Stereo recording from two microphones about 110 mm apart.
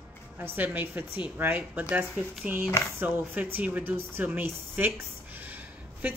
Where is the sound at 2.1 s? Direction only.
5° right (ahead or behind).